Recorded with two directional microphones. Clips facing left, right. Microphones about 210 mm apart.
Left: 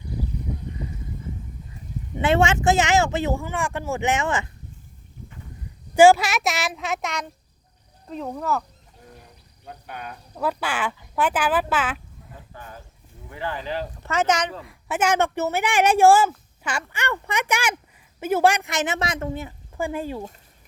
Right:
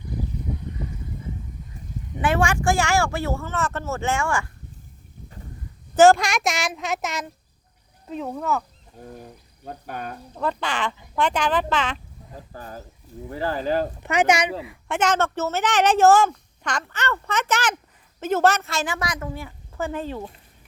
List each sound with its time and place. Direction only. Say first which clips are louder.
2.2 s speech: left 2 dB; 25° left (ahead or behind)
5.9 s a woman's voice: left 1 dB; 10° left (ahead or behind)
9.0 s cricket: right 8 dB; 45° right (ahead or behind)
9.6 s speech: right 4 dB; 45° right (ahead or behind)
10.4 s speech: even; 5° left (ahead or behind)
12.3 s a sound: right 4 dB; 40° right (ahead or behind)
13.3 s speech: right 5 dB; 40° right (ahead or behind)
14.0 s speech: even; 15° right (ahead or behind)
14.6 s speech: even; 5° left (ahead or behind)